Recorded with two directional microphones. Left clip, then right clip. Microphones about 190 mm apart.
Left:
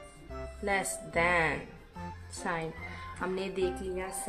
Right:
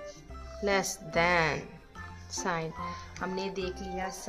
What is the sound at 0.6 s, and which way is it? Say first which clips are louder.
Speech: right 3 dB; 20° right (ahead or behind).